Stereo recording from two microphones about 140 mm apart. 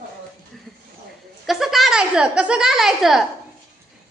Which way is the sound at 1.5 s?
Centre (ahead or behind).